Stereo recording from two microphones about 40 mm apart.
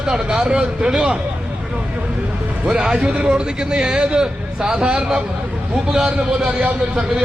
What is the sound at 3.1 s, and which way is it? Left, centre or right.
Speech, right.